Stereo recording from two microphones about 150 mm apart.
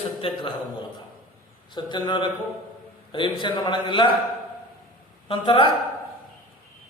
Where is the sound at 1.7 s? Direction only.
30° left (ahead or behind).